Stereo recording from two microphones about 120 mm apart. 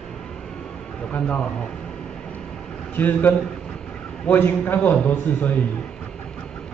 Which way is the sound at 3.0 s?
15° left (ahead or behind).